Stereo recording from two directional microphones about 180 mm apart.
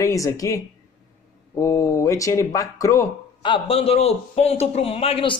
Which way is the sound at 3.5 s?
30° left (ahead or behind).